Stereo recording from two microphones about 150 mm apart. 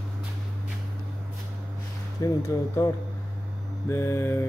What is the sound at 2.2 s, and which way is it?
Speech, 20° left (ahead or behind).